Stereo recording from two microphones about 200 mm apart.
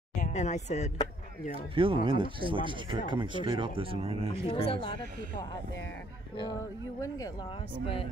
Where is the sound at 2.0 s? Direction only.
25° right (ahead or behind).